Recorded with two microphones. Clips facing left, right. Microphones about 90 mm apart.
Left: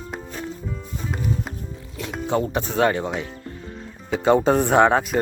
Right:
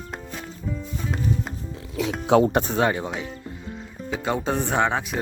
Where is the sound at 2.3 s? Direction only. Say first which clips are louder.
Right 6 dB; 90° right.